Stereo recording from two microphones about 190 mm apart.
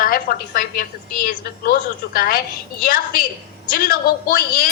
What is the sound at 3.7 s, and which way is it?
Speech, 50° left (ahead or behind).